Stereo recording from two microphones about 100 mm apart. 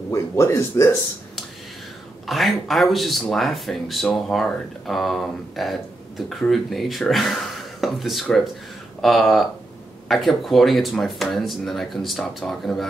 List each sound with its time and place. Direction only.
0.1 s speech: 25° left (ahead or behind)
2.2 s speech: centre (ahead or behind)